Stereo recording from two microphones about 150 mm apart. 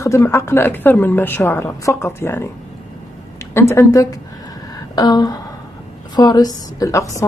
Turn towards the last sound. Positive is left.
turn(degrees=20)  # may be behind; listen again after turning